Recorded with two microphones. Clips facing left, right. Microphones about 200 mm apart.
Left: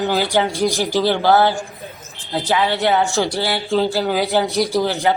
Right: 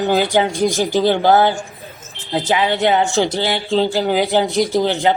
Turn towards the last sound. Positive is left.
turn(degrees=-20)  # may be behind; listen again after turning